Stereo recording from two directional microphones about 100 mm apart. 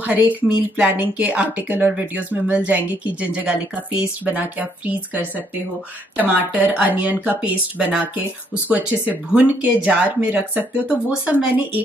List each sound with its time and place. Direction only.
0.0 s speech: 15° right (ahead or behind)